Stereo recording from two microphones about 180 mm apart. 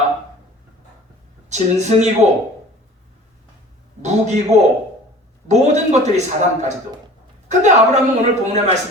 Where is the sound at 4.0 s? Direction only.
40° right (ahead or behind).